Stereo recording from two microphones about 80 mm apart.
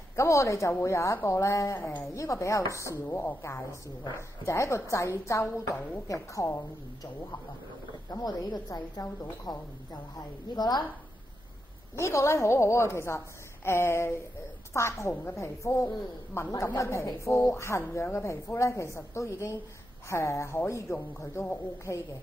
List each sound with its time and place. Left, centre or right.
0.1 s a woman's voice: left
3.1 s a woman's voice: left
8.1 s a woman's voice: left
12.0 s a woman's voice: left